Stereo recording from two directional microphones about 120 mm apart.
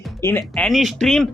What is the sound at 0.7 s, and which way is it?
Speech, centre (ahead or behind).